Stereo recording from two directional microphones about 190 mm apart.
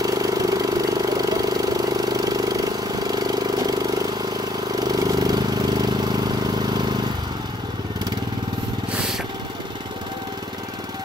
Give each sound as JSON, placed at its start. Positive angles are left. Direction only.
{"t": 0.0, "sound": "vehicle", "side_deg": -20}